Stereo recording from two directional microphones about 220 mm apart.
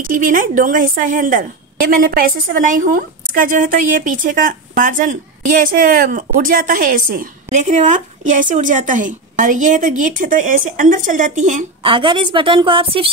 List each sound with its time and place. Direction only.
0.0 s a woman's voice: 35° right (ahead or behind)
11.8 s a woman's voice: 25° right (ahead or behind)